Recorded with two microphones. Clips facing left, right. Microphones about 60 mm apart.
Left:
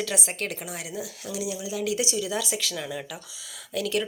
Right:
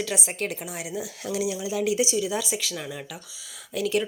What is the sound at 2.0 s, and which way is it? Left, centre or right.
Speech, centre.